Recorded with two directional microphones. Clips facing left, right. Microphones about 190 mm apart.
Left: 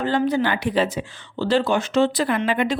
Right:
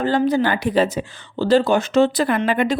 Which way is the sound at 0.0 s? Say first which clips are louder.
Right 3 dB; 40° right (ahead or behind).